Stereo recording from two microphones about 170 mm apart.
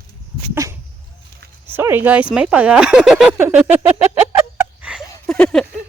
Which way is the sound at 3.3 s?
10° right (ahead or behind).